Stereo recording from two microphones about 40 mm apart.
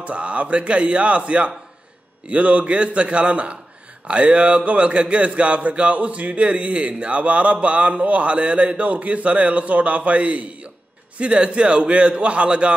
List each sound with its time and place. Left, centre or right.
0.0 s a man's voice: right